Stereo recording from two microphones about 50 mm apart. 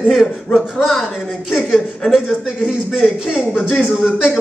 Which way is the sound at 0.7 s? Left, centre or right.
Centre.